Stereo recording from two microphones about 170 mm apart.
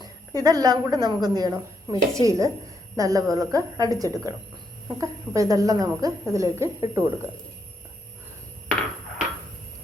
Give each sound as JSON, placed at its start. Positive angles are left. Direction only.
{"t": 0.4, "sound": "a woman's voice", "side_deg": -25}